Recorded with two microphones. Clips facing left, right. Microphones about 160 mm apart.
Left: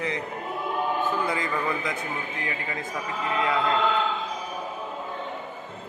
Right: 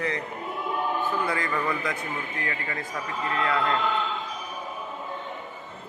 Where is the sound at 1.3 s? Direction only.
20° left (ahead or behind).